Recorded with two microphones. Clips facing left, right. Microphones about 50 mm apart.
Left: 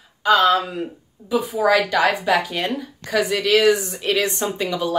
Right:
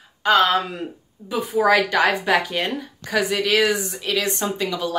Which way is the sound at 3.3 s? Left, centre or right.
Centre.